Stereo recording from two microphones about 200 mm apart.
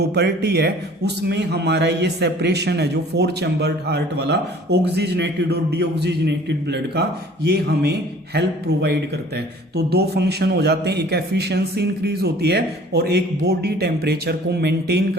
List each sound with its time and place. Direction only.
0.0 s a man's voice: 55° right (ahead or behind)